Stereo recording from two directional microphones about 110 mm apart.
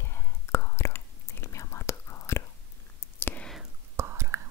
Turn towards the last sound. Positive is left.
turn(degrees=-25)  # may be behind; listen again after turning